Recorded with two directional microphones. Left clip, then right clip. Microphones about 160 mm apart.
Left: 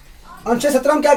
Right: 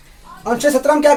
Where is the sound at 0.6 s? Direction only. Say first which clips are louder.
Right 3 dB; 40° right (ahead or behind).